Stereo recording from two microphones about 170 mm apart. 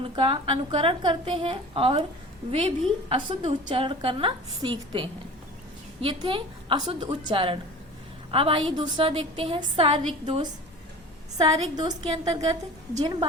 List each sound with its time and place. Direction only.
0.0 s a woman's voice: 30° right (ahead or behind)